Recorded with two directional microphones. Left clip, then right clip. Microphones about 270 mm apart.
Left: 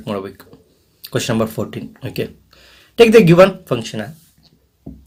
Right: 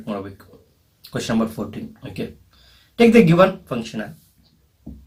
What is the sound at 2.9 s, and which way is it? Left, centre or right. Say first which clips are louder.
Speech: left 5 dB; left.